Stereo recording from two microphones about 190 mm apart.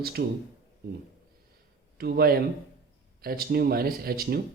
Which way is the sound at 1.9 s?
55° right (ahead or behind).